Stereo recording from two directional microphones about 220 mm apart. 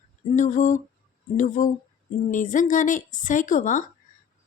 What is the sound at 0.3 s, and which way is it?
A woman's voice, 35° left (ahead or behind).